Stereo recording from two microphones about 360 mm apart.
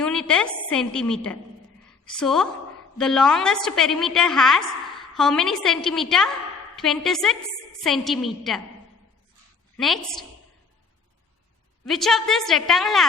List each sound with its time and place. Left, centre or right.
0.0 s a woman's voice: centre
9.7 s a woman's voice: centre
11.9 s a woman's voice: centre